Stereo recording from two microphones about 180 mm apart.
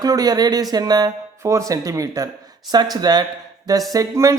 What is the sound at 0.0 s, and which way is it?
Speech, 20° right (ahead or behind).